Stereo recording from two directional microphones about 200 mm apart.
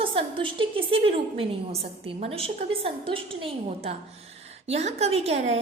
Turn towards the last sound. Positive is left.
turn(degrees=-30)  # may be behind; listen again after turning